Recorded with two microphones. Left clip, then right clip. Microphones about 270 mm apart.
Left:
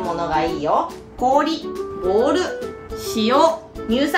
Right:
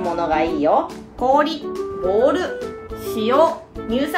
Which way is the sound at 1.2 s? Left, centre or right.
Centre.